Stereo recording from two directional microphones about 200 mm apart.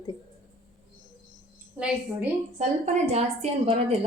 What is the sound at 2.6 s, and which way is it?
A woman's voice, 35° right (ahead or behind).